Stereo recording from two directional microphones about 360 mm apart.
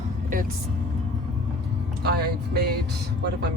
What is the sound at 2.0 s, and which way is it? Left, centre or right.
Speech, right.